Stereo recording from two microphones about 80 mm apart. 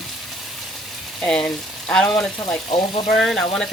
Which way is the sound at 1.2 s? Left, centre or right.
Centre.